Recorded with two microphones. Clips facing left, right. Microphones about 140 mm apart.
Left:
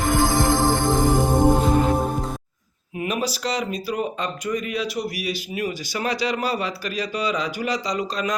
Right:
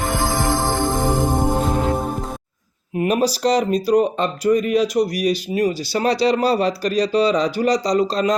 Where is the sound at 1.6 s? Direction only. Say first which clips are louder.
Left 1 dB; centre (ahead or behind).